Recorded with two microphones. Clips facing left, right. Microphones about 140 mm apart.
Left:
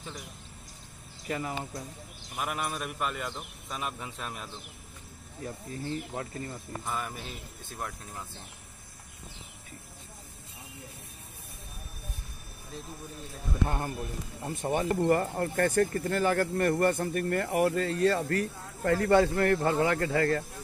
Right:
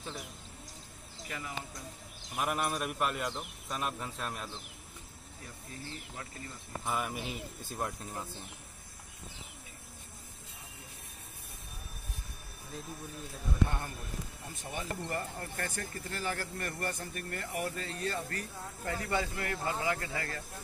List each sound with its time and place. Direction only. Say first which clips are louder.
1.3 s speech: left 10 dB; 40° left (ahead or behind)
2.3 s speech: right 1 dB; centre (ahead or behind)
5.4 s speech: left 10 dB; 40° left (ahead or behind)
6.9 s speech: right 1 dB; 10° right (ahead or behind)
13.7 s speech: left 7 dB; 40° left (ahead or behind)
14.4 s speech: left 14 dB; 55° left (ahead or behind)